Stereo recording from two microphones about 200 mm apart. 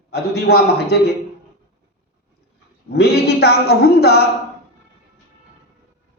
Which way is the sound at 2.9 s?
55° left (ahead or behind).